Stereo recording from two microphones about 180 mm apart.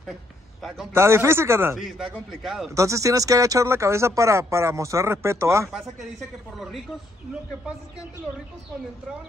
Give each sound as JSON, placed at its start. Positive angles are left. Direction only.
{"t": 0.6, "sound": "a man's voice", "side_deg": 0}
{"t": 0.9, "sound": "speech", "side_deg": -15}
{"t": 1.8, "sound": "a man's voice", "side_deg": 0}
{"t": 2.7, "sound": "speech", "side_deg": -15}
{"t": 5.7, "sound": "a man's voice", "side_deg": -5}